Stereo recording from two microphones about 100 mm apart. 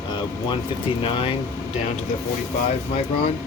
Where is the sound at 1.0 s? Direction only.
60° left (ahead or behind).